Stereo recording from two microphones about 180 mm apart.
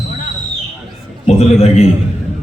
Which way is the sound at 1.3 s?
35° left (ahead or behind).